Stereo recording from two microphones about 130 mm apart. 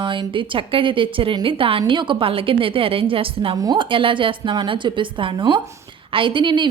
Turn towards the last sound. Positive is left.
turn(degrees=-40)  # may be behind; listen again after turning